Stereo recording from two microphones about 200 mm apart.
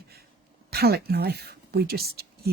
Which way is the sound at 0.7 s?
50° right (ahead or behind).